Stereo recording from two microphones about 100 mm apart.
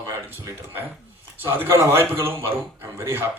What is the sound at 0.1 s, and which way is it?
A man's voice, 25° right (ahead or behind).